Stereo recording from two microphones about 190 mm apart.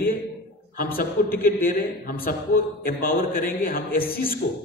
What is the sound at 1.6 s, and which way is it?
A man's voice, 55° left (ahead or behind).